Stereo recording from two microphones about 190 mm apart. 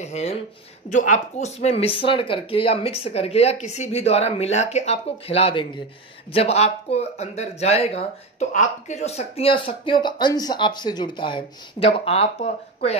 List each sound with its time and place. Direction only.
0.0 s speech: 35° left (ahead or behind)